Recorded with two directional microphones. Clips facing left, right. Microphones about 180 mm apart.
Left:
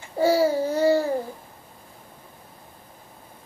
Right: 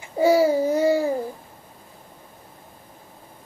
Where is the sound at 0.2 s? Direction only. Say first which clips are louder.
Right 3 dB; 15° right (ahead or behind).